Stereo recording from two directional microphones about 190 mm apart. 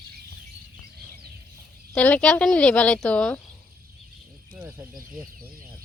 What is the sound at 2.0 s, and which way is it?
A woman's voice, 5° left (ahead or behind).